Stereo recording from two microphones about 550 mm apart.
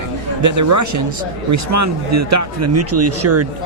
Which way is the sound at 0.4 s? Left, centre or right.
Right.